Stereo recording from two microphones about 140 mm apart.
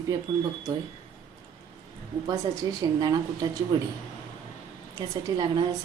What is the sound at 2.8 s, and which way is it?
Speech, 30° right (ahead or behind).